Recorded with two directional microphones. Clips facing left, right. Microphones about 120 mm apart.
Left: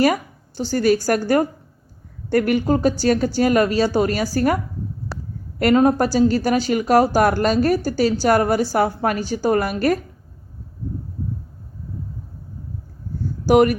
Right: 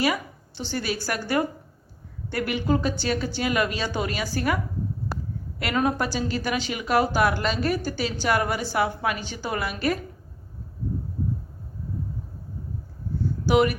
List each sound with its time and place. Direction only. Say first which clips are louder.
0.0 s a woman's voice: left 7 dB; 45° left (ahead or behind)
5.7 s a woman's voice: left 8 dB; 40° left (ahead or behind)
13.4 s speech: left 6 dB; 45° left (ahead or behind)